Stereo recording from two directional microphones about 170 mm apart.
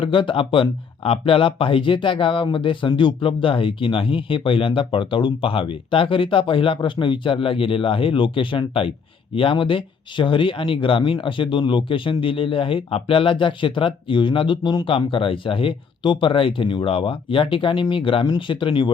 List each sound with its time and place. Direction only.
0.0 s speech: 30° left (ahead or behind)